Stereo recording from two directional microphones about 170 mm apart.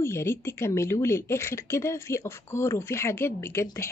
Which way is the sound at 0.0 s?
15° left (ahead or behind).